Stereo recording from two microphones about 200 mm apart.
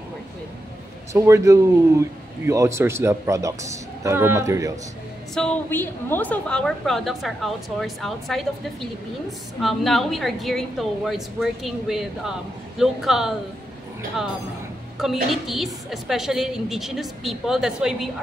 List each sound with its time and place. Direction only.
1.1 s a man's voice: 15° right (ahead or behind)
5.3 s a woman's voice: 5° left (ahead or behind)
9.6 s a woman's voice: centre (ahead or behind)
15.2 s a woman's voice: centre (ahead or behind)